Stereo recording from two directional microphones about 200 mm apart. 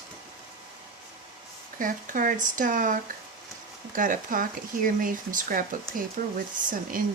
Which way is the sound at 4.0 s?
45° right (ahead or behind).